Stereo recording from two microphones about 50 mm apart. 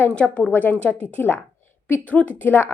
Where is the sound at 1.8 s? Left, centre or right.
Left.